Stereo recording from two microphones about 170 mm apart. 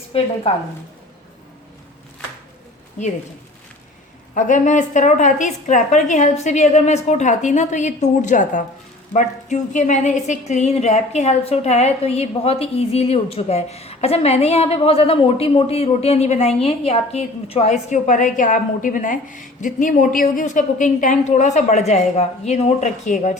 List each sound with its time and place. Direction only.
0.1 s a woman's voice: 35° left (ahead or behind)
4.4 s a woman's voice: 45° left (ahead or behind)